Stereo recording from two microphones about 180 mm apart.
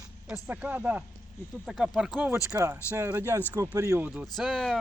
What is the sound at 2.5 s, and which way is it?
Speech, 15° right (ahead or behind).